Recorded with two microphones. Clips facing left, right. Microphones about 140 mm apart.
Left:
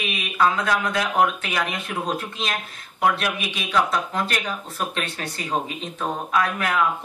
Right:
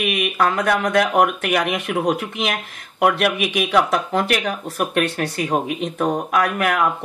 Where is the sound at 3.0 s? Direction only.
70° right (ahead or behind).